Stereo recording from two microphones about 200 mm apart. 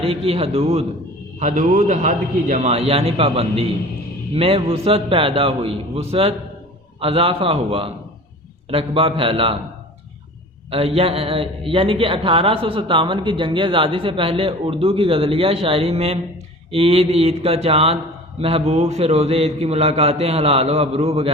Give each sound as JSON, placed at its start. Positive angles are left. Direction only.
{"t": 0.0, "sound": "a man's voice", "side_deg": -30}
{"t": 1.4, "sound": "a man's voice", "side_deg": -40}
{"t": 10.7, "sound": "a man's voice", "side_deg": -30}